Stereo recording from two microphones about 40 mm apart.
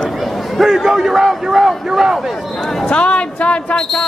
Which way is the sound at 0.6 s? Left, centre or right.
Centre.